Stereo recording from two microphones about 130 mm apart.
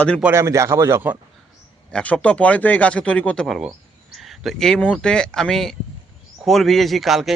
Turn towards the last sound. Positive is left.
turn(degrees=0)  # may be behind; listen again after turning